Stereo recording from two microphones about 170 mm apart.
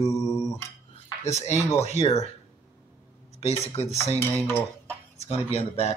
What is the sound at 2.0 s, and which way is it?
Speech, 40° left (ahead or behind).